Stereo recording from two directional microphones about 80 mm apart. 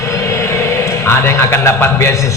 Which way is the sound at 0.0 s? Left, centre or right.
Left.